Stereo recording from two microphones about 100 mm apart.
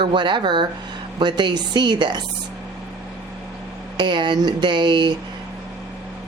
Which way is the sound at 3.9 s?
50° right (ahead or behind).